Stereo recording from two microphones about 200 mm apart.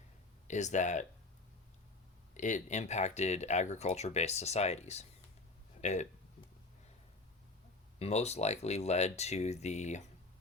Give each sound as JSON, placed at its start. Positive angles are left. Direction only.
{"t": 0.4, "sound": "speech", "side_deg": 35}
{"t": 2.3, "sound": "speech", "side_deg": 40}
{"t": 7.9, "sound": "speech", "side_deg": 30}